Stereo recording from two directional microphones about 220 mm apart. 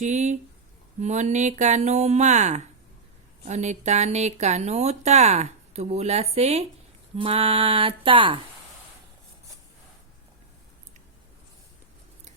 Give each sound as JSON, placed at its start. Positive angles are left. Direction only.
{"t": 0.0, "sound": "speech", "side_deg": -30}
{"t": 6.3, "sound": "music", "side_deg": -30}